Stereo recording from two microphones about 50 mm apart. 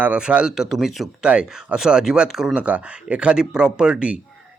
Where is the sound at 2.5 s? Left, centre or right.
Right.